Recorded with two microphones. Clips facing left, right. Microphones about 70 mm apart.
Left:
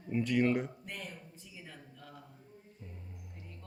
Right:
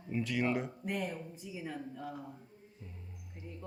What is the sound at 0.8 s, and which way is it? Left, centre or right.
A woman's voice, centre.